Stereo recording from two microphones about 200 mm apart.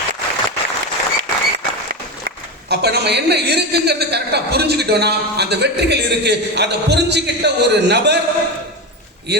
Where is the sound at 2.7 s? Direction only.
55° right (ahead or behind).